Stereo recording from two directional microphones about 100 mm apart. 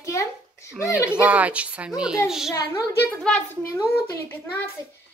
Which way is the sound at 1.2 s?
15° right (ahead or behind).